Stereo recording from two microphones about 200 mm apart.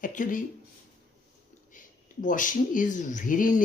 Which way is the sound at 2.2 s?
40° left (ahead or behind).